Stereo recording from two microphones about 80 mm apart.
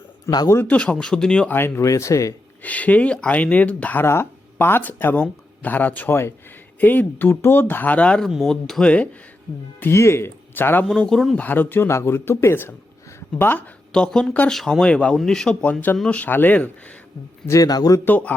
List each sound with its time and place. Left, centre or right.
0.3 s speech: left
0.5 s speech: left
1.5 s speech: left
1.9 s speech: left
2.6 s speech: centre
4.0 s speech: left; by 8.9 s centre
9.8 s speech: left
10.8 s speech: centre
11.3 s speech: left
13.9 s speech: centre
15.6 s speech: left
17.4 s a man's voice: left
17.7 s speech: left
18.0 s speech: left